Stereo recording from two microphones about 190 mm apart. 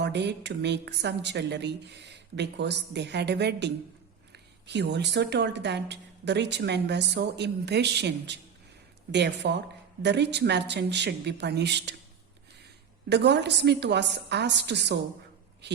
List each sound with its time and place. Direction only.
0.0 s a woman's voice: 65° right (ahead or behind)
13.1 s a woman's voice: 65° right (ahead or behind)